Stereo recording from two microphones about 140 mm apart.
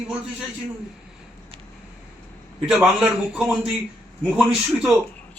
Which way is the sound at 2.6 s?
5° right (ahead or behind).